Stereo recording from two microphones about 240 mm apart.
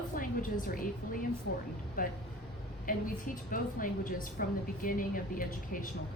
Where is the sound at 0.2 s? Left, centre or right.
Left.